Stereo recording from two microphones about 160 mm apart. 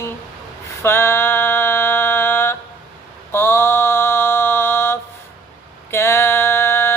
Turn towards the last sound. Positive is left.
turn(degrees=15)  # may be behind; listen again after turning